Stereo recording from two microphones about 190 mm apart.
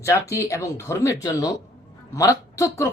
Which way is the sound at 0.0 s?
15° left (ahead or behind).